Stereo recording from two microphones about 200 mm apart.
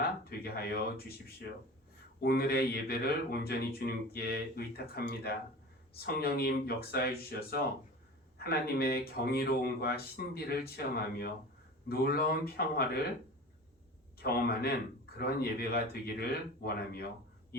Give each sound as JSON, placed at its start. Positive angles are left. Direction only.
{"t": 0.3, "sound": "speech", "side_deg": 50}
{"t": 2.2, "sound": "speech", "side_deg": 50}
{"t": 14.2, "sound": "speech", "side_deg": 50}